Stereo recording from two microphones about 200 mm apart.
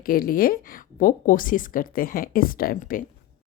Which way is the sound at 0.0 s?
45° left (ahead or behind).